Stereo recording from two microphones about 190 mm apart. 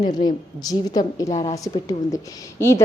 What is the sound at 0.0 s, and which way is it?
A woman's voice, 20° left (ahead or behind).